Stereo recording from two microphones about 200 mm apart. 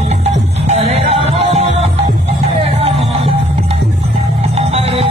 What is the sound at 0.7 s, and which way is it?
Music, 30° right (ahead or behind).